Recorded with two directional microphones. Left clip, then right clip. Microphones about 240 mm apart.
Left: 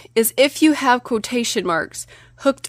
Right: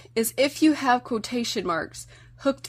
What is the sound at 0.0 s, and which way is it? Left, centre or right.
Speech, left.